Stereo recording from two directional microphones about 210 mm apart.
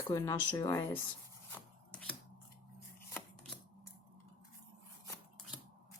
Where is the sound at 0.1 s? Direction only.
15° left (ahead or behind).